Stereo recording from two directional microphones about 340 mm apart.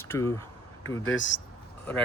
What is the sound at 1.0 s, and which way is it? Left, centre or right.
Speech, left.